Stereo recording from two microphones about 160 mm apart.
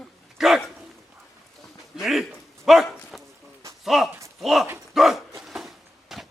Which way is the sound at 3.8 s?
Centre (ahead or behind).